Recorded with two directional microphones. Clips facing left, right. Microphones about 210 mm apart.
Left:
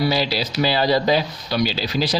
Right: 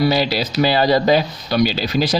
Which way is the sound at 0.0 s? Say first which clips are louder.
Right 4 dB; 50° right (ahead or behind).